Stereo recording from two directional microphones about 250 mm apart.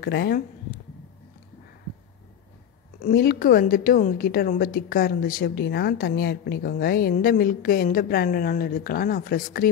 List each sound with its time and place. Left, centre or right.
0.0 s a woman's voice: left
3.0 s a woman's voice: left